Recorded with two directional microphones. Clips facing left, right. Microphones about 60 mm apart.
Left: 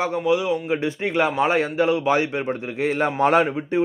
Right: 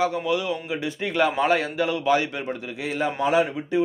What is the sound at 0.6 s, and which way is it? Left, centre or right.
A man's voice, left.